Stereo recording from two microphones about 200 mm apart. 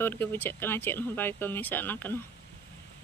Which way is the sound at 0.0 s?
10° left (ahead or behind).